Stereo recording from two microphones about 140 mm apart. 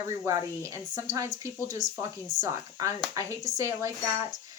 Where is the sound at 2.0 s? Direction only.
25° right (ahead or behind).